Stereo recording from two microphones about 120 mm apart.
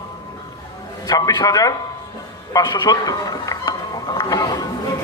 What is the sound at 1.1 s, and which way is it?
A man's voice, 35° left (ahead or behind).